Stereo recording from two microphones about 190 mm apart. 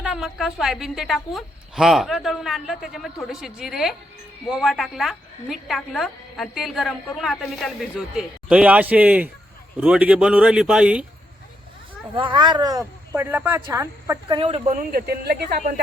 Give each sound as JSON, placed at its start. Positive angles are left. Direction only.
{"t": 0.0, "sound": "a woman's voice", "side_deg": -5}
{"t": 12.1, "sound": "speech", "side_deg": -25}
{"t": 14.3, "sound": "speech", "side_deg": -25}
{"t": 14.7, "sound": "speech", "side_deg": -45}